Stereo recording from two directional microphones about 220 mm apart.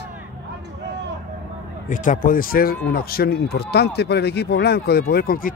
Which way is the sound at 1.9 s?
35° left (ahead or behind).